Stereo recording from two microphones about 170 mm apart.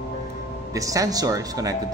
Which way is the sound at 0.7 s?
20° right (ahead or behind).